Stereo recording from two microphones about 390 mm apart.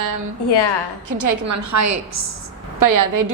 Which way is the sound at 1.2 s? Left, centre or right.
Right.